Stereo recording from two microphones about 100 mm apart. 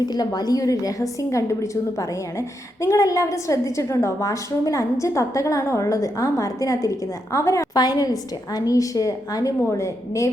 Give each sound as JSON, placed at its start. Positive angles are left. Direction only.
{"t": 0.0, "sound": "a woman's voice", "side_deg": 45}